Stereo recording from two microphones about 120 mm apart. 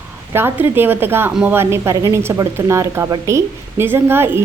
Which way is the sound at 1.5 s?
20° right (ahead or behind).